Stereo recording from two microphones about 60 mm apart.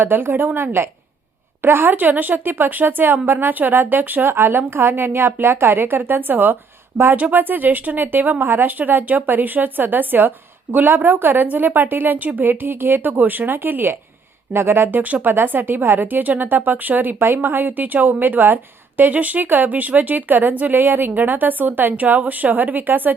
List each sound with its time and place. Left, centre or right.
0.0 s a woman's voice: right